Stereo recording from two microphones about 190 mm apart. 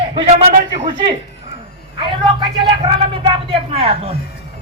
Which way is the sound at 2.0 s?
25° right (ahead or behind).